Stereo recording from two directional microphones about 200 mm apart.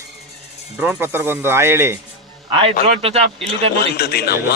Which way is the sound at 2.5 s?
25° right (ahead or behind).